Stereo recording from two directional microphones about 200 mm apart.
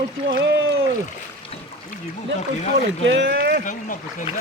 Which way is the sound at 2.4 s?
35° left (ahead or behind).